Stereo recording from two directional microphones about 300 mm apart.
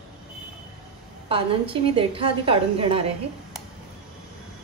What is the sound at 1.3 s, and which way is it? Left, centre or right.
A woman's voice, centre.